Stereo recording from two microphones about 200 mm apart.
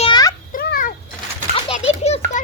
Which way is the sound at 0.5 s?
45° left (ahead or behind).